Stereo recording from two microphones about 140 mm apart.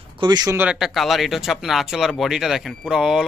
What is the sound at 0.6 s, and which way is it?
Speech, 5° right (ahead or behind).